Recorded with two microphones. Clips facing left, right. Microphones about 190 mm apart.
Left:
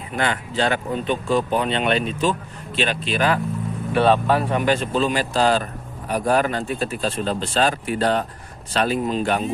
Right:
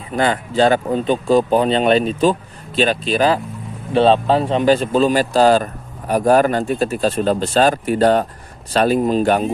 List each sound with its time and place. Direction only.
0.1 s speech: 35° right (ahead or behind)
3.9 s speech: 25° right (ahead or behind); by 9.4 s 45° right (ahead or behind)